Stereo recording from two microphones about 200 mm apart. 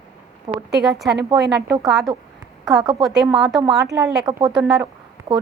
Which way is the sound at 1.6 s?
15° right (ahead or behind).